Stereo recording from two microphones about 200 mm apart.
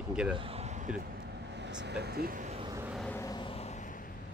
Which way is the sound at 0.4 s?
30° right (ahead or behind).